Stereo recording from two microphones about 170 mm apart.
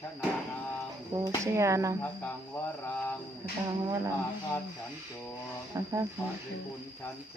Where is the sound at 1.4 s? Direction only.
15° right (ahead or behind).